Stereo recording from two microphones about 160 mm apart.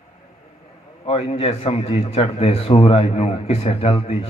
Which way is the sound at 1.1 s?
35° left (ahead or behind).